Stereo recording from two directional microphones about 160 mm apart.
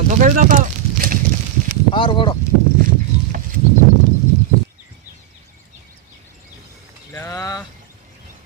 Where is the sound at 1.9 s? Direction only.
30° left (ahead or behind).